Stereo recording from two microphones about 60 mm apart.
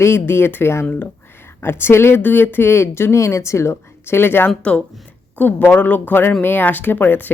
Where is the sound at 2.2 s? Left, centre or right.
Left.